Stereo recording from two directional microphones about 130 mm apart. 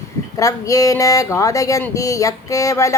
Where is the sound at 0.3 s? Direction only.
25° left (ahead or behind).